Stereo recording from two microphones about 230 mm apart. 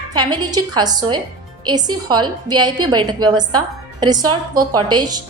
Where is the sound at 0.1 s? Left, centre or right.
Centre.